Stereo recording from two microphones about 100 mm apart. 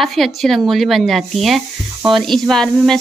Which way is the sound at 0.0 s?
Centre (ahead or behind).